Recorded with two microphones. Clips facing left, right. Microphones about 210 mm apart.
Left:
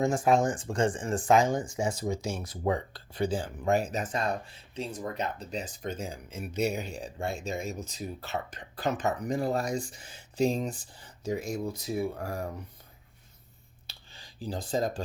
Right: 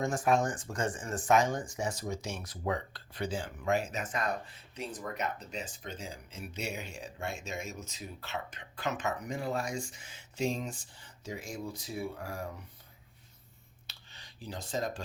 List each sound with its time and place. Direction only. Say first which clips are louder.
0.0 s speech: left 4 dB; 25° left (ahead or behind); by 12.5 s 40° left (ahead or behind)
13.8 s finger snapping: left 4 dB; 30° left (ahead or behind)